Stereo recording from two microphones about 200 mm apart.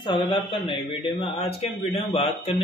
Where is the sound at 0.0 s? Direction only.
25° left (ahead or behind).